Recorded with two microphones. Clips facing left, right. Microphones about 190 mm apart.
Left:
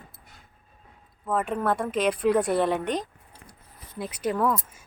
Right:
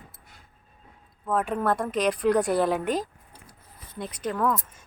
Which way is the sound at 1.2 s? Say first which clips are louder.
Right 1 dB; centre (ahead or behind).